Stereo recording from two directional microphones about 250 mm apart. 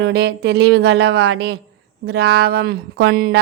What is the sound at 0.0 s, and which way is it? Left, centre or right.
Speech, right.